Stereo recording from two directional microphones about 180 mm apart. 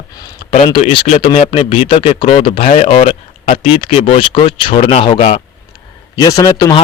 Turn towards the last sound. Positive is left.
turn(degrees=20)  # may be behind; listen again after turning